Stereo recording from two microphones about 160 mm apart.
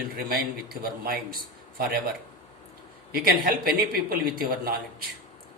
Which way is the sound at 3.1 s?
70° right (ahead or behind).